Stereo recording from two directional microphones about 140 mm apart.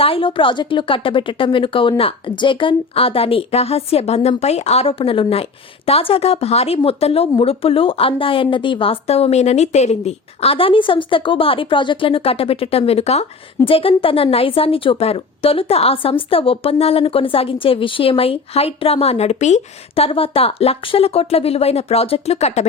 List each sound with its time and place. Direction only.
0.0 s a woman's voice: 40° left (ahead or behind)
20.1 s a woman's voice: 40° left (ahead or behind)